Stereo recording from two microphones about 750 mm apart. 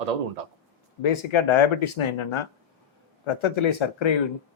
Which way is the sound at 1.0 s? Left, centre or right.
Left.